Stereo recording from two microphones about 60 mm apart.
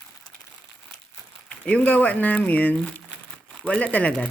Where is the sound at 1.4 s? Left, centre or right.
Left.